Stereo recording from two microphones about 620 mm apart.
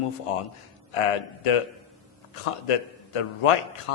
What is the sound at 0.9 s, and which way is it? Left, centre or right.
A man's voice, left.